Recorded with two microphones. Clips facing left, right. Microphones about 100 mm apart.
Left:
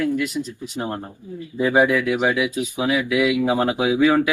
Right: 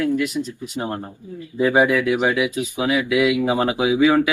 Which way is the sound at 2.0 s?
15° right (ahead or behind).